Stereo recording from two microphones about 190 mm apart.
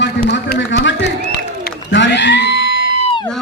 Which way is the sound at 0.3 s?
60° left (ahead or behind).